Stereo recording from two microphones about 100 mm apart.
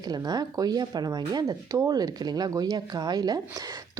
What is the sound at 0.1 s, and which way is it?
Speech, 40° right (ahead or behind).